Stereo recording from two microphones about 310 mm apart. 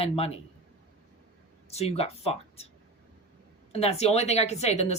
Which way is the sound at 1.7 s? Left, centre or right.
Centre.